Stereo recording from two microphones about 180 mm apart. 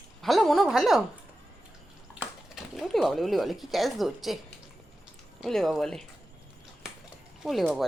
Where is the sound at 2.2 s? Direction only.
Centre (ahead or behind).